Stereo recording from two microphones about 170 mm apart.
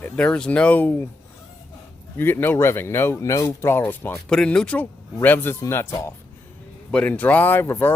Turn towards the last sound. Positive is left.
turn(degrees=15)  # may be behind; listen again after turning